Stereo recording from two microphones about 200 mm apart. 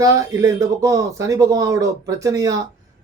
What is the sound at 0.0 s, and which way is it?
Speech, 15° right (ahead or behind).